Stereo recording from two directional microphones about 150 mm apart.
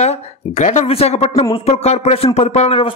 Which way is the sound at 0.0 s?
50° left (ahead or behind).